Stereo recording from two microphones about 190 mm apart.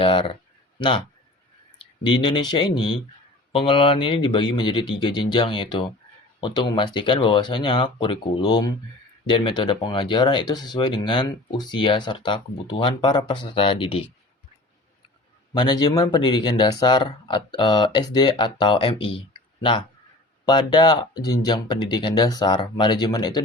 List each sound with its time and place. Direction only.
0.0 s speech: 30° left (ahead or behind)
2.0 s speech: 25° left (ahead or behind)
15.5 s speech: 20° left (ahead or behind)
20.4 s speech: 20° left (ahead or behind)